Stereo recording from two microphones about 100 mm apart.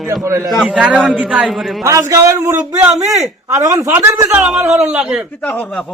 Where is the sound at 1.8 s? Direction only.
30° right (ahead or behind).